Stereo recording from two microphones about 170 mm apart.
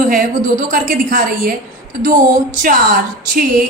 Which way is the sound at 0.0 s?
50° right (ahead or behind).